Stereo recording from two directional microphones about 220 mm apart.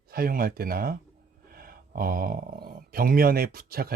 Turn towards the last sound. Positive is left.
turn(degrees=-40)  # may be behind; listen again after turning